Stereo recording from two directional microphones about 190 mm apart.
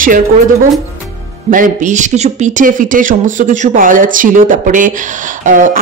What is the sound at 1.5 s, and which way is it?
Speech, 45° right (ahead or behind).